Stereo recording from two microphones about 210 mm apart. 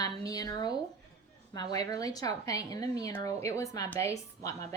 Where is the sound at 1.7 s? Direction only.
15° left (ahead or behind).